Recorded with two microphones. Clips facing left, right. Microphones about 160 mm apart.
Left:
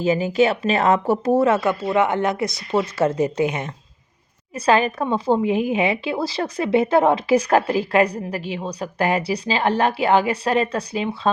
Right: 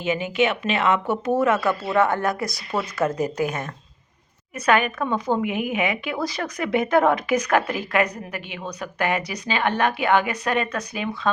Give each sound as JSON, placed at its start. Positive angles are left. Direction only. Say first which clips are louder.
{"t": 0.0, "sound": "speech", "louder": "left 4 dB", "side_deg": 35}
{"t": 1.8, "sound": "speech", "louder": "left 2 dB", "side_deg": 15}